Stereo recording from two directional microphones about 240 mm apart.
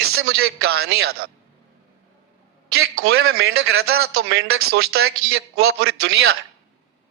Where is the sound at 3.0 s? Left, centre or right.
Right.